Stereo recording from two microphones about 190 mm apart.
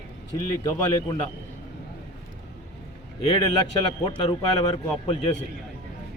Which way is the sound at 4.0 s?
25° left (ahead or behind).